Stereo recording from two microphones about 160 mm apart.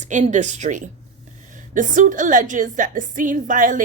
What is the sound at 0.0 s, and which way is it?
A woman's voice, 50° right (ahead or behind).